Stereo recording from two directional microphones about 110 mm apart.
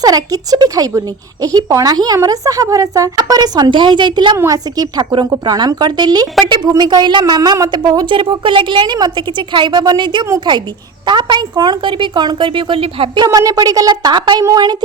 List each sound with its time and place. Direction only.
0.0 s a woman's voice: 35° right (ahead or behind)
4.4 s a woman's voice: 35° right (ahead or behind); by 13.2 s 55° right (ahead or behind)
13.2 s a woman's voice: 30° right (ahead or behind)